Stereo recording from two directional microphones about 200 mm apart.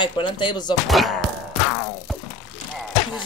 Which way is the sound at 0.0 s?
25° left (ahead or behind).